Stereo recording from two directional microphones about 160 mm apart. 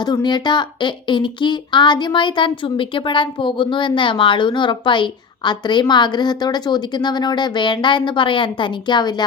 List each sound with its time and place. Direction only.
0.0 s a woman's voice: 25° left (ahead or behind)